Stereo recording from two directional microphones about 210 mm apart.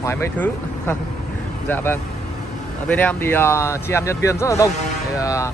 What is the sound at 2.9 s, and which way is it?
Speech, 5° left (ahead or behind).